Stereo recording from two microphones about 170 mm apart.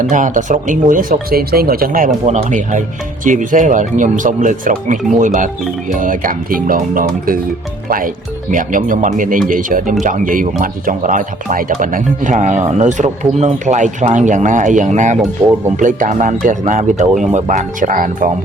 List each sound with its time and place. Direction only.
0.0 s speech: 50° right (ahead or behind)
15.4 s speech: 20° right (ahead or behind)
15.8 s speech: 50° right (ahead or behind)